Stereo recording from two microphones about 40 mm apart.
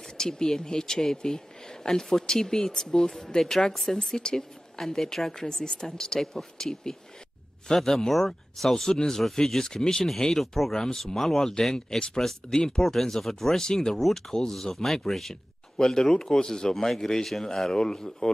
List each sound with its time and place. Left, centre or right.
0.2 s speech: centre
4.2 s a woman's voice: centre